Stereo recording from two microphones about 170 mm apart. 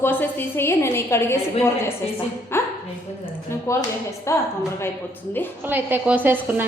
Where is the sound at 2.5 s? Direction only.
15° left (ahead or behind).